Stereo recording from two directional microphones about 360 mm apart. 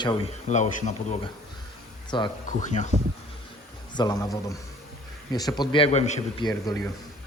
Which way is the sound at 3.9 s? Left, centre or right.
Centre.